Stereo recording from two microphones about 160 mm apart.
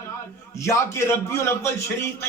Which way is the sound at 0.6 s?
15° left (ahead or behind).